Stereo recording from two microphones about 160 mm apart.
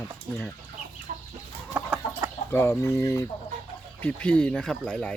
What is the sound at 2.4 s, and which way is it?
Speech, 15° left (ahead or behind).